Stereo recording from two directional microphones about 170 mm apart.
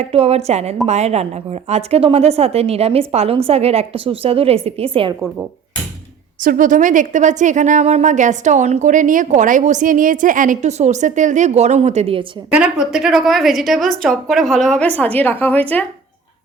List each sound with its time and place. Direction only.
0.0 s a woman's voice: 35° right (ahead or behind)
6.4 s a woman's voice: 55° right (ahead or behind); by 12.2 s 35° right (ahead or behind)
12.5 s a woman's voice: 10° right (ahead or behind); by 15.8 s 10° left (ahead or behind)